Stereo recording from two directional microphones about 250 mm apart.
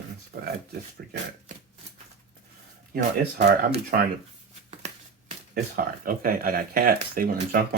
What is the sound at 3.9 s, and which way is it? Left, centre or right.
Speech, right.